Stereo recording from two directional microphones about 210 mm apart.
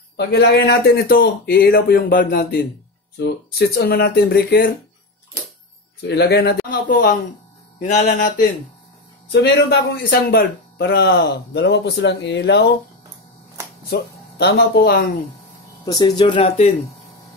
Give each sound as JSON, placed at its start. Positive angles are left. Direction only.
{"t": 0.2, "sound": "speech", "side_deg": 50}
{"t": 6.0, "sound": "speech", "side_deg": 50}
{"t": 9.3, "sound": "speech", "side_deg": 50}
{"t": 14.4, "sound": "speech", "side_deg": 45}
{"t": 15.8, "sound": "speech", "side_deg": 20}